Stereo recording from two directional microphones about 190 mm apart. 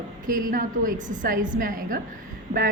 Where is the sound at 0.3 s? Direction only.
45° right (ahead or behind).